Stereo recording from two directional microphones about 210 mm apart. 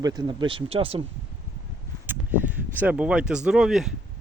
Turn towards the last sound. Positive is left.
turn(degrees=0)  # may be behind; listen again after turning